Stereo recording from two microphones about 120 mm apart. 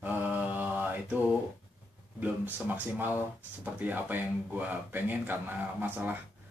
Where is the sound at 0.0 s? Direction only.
15° right (ahead or behind).